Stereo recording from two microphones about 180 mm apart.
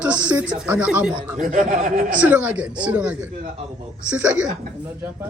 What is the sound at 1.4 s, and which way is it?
Speech, 45° right (ahead or behind).